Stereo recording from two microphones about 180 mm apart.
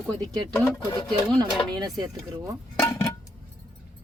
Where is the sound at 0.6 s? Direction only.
15° left (ahead or behind).